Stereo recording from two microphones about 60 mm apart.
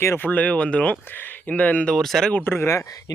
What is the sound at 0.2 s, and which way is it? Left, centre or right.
Speech, left.